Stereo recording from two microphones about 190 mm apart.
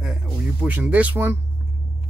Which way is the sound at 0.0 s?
5° right (ahead or behind).